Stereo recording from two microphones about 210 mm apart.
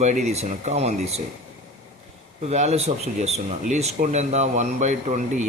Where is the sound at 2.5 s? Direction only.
30° right (ahead or behind).